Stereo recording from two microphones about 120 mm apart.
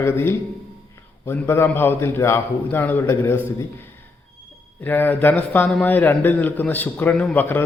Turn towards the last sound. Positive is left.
turn(degrees=15)  # may be behind; listen again after turning